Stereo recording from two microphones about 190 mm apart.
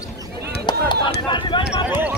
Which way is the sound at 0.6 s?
25° left (ahead or behind).